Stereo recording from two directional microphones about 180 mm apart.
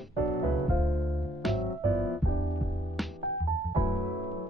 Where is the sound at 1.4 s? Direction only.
Centre (ahead or behind).